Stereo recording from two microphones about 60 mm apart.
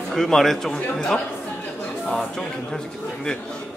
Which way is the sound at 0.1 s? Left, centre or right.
Centre.